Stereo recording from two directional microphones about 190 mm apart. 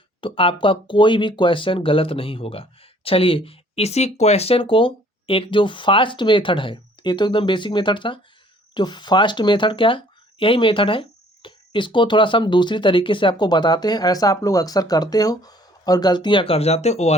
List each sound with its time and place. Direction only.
0.2 s speech: 25° left (ahead or behind)